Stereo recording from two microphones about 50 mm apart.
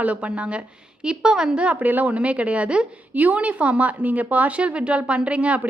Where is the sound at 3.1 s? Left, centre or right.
Right.